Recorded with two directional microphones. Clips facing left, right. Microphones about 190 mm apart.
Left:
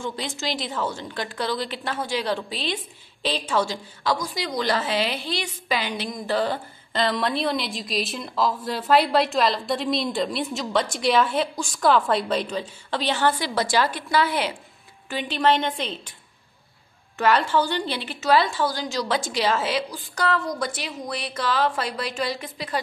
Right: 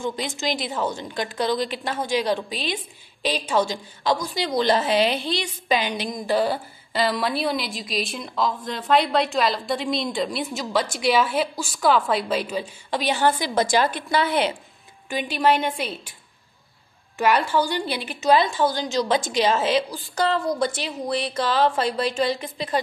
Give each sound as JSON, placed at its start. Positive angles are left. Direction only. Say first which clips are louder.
{"t": 0.0, "sound": "a woman's voice", "louder": "right 3 dB", "side_deg": -15}
{"t": 15.0, "sound": "a woman's voice", "louder": "right 1 dB", "side_deg": -15}
{"t": 17.2, "sound": "a woman's voice", "louder": "even", "side_deg": -10}